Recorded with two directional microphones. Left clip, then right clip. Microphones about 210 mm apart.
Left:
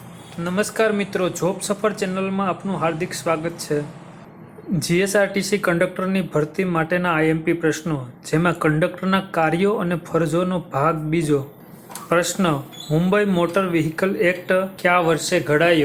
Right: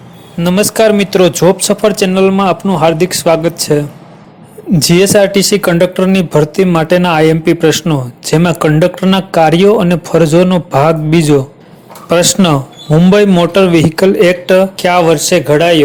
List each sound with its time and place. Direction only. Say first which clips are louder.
0.3 s speech: right 11 dB; 35° right (ahead or behind)